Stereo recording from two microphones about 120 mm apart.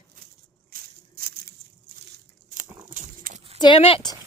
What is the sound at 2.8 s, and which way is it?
Dog, 90° right.